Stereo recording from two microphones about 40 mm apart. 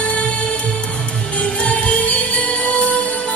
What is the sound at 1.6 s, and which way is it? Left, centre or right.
Music, left.